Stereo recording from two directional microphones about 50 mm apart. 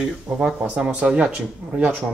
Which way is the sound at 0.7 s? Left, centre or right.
Centre.